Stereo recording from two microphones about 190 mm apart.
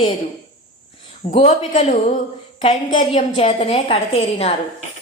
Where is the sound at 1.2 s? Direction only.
40° left (ahead or behind).